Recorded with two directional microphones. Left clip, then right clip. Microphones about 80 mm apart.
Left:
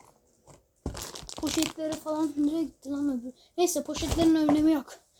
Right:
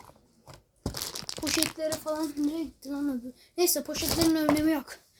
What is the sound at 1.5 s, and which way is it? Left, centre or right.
Speech, centre.